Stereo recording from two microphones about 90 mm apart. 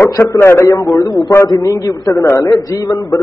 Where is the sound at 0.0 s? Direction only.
35° left (ahead or behind).